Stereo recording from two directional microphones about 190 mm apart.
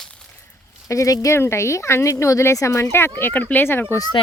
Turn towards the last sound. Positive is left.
turn(degrees=20)  # may be behind; listen again after turning